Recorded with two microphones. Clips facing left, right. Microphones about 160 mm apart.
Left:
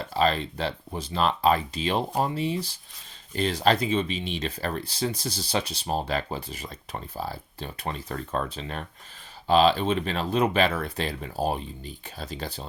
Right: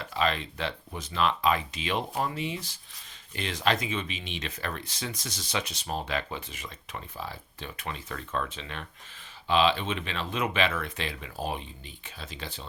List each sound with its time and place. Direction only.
0.0 s speech: 35° left (ahead or behind)